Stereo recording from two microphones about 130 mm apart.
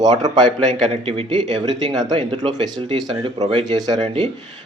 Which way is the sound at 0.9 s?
45° right (ahead or behind).